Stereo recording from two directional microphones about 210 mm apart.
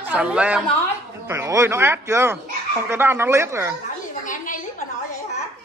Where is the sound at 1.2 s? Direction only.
15° right (ahead or behind).